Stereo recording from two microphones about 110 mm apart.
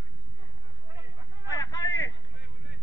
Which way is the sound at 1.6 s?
15° left (ahead or behind).